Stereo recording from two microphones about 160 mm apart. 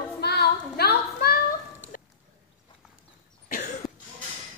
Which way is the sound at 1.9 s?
65° left (ahead or behind).